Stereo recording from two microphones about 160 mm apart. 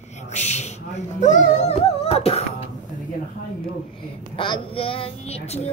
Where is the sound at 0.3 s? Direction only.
45° left (ahead or behind).